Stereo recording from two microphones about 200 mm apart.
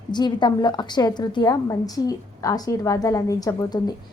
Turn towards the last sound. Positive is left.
turn(degrees=20)  # may be behind; listen again after turning